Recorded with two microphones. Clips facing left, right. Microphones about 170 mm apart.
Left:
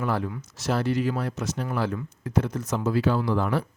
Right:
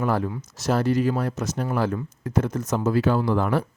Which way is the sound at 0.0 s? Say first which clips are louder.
Right 3 dB; 45° right (ahead or behind).